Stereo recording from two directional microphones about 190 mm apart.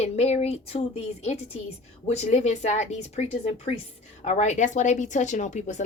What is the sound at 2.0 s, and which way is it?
Speech, 35° left (ahead or behind).